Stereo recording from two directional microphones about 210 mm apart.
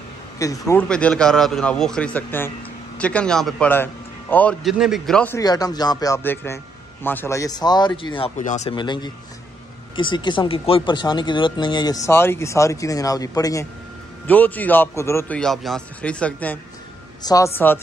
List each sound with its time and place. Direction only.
0.4 s a man's voice: 15° left (ahead or behind)
0.8 s a man's voice: 5° left (ahead or behind); by 8.3 s 25° left (ahead or behind)
8.4 s speech: 35° left (ahead or behind)
8.7 s a man's voice: 20° left (ahead or behind)
17.2 s speech: 20° left (ahead or behind)